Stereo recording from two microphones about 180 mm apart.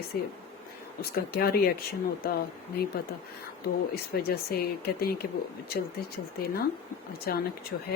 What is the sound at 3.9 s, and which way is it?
Speech, 60° left (ahead or behind).